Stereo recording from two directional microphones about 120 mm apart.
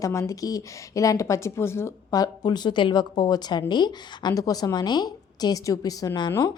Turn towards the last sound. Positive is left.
turn(degrees=35)  # may be behind; listen again after turning